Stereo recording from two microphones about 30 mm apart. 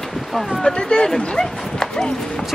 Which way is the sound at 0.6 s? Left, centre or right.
Left.